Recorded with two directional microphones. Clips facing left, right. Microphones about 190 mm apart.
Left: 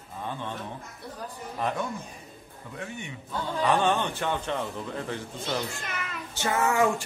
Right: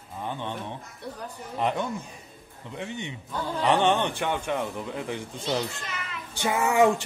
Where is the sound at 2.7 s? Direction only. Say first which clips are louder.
Right 3 dB; 20° right (ahead or behind).